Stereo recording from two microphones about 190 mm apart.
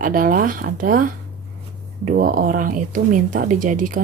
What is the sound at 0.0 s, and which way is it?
Speech, 45° right (ahead or behind).